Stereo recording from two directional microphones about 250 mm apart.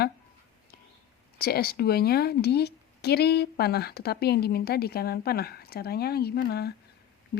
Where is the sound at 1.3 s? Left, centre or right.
Left.